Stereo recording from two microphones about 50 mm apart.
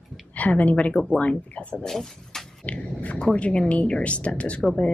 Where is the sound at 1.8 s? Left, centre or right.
Centre.